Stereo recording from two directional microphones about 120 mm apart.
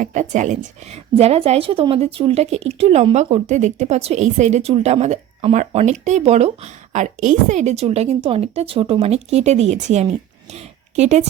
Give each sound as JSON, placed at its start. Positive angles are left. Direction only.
{"t": 0.0, "sound": "speech", "side_deg": -90}
{"t": 1.1, "sound": "a woman's voice", "side_deg": -55}